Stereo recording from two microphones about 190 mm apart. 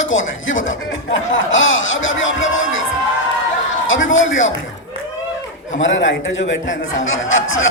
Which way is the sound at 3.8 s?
90° left.